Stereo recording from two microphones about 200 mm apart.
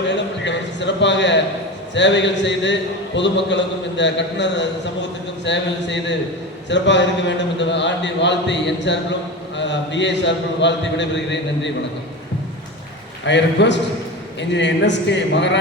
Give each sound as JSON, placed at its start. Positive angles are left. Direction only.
{"t": 0.1, "sound": "a sound", "side_deg": 60}
{"t": 2.0, "sound": "a man's voice", "side_deg": 60}
{"t": 13.2, "sound": "a man's voice", "side_deg": 60}